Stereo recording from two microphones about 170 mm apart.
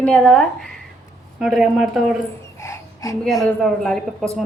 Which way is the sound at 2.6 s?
20° left (ahead or behind).